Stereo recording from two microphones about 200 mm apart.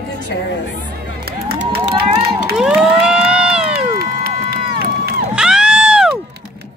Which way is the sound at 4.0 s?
50° right (ahead or behind).